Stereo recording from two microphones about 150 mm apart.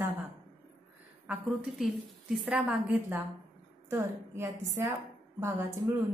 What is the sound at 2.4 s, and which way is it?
A woman's voice, 5° right (ahead or behind).